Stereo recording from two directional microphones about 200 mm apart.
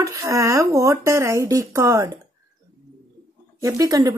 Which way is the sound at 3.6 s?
15° right (ahead or behind).